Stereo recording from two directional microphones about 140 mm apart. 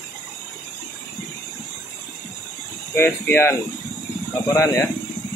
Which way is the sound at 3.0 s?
15° left (ahead or behind).